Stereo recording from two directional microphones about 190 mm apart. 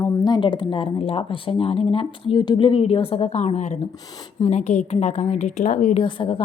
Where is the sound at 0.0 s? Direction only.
25° left (ahead or behind); by 6.0 s 40° left (ahead or behind).